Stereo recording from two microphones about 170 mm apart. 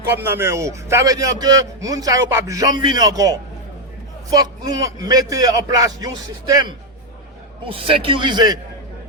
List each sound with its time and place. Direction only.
0.2 s a man's voice: 15° right (ahead or behind)